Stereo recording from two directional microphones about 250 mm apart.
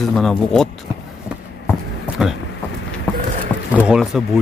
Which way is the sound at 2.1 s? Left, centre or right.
Centre.